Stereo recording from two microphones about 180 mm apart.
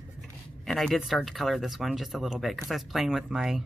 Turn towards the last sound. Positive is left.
turn(degrees=0)  # may be behind; listen again after turning